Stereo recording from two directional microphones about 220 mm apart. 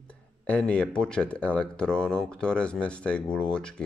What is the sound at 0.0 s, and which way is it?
Speech, 5° left (ahead or behind).